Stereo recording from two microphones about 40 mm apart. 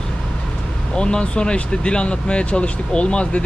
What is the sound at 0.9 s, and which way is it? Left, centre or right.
Speech, left.